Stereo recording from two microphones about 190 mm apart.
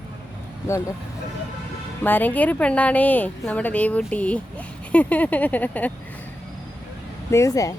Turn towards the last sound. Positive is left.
turn(degrees=15)  # may be behind; listen again after turning